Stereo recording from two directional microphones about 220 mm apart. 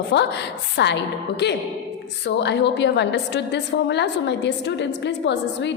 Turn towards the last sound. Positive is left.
turn(degrees=55)  # may be behind; listen again after turning